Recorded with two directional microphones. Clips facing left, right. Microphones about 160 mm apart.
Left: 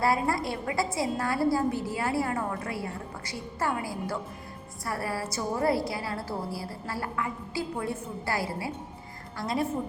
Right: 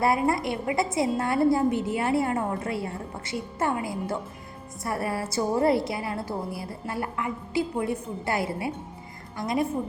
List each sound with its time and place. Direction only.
0.0 s a woman's voice: 20° right (ahead or behind)